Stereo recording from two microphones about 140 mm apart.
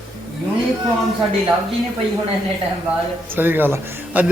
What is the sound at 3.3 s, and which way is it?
Speech, 15° right (ahead or behind).